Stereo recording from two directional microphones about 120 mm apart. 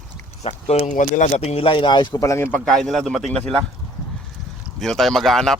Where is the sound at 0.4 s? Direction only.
65° left (ahead or behind); by 2.2 s 40° left (ahead or behind).